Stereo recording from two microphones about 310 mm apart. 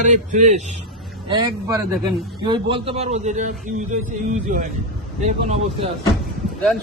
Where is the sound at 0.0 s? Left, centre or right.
Right.